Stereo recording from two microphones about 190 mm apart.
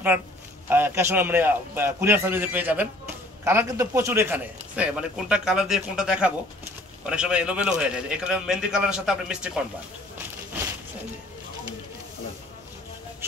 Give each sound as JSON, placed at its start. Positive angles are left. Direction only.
{"t": 0.7, "sound": "a man's voice", "side_deg": -10}